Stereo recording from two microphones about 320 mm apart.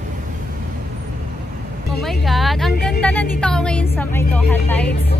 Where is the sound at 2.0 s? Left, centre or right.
Centre.